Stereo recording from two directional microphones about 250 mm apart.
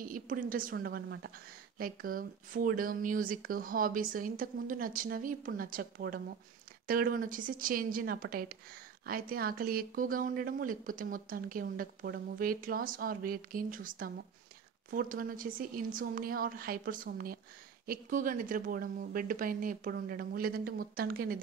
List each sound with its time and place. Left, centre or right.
0.0 s a woman's voice: right